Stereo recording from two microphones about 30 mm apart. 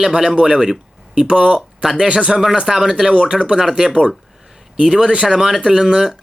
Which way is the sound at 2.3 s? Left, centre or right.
Centre.